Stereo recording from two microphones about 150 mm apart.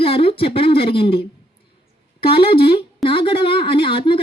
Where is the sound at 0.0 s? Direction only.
40° left (ahead or behind).